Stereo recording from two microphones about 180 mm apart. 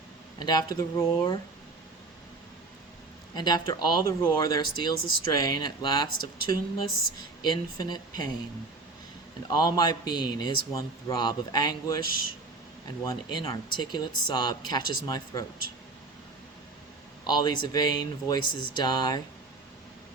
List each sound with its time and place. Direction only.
0.3 s speech: 25° left (ahead or behind)
3.3 s speech: 25° left (ahead or behind)
7.4 s speech: 25° left (ahead or behind)
9.5 s speech: 25° left (ahead or behind)
13.1 s speech: 20° left (ahead or behind)
17.2 s speech: 25° left (ahead or behind)